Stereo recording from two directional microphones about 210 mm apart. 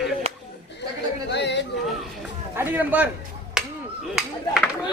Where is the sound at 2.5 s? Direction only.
10° right (ahead or behind).